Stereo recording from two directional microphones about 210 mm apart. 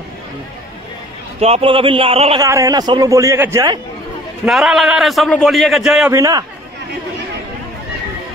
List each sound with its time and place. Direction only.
1.4 s a man's voice: 30° right (ahead or behind)
2.4 s speech: 15° right (ahead or behind)
4.5 s a man's voice: centre (ahead or behind)
6.0 s speech: 15° right (ahead or behind)